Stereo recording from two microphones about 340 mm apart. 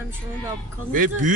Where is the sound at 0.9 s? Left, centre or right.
Right.